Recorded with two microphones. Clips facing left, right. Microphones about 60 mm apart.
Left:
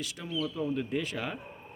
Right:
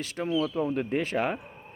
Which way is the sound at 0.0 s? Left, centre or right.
Right.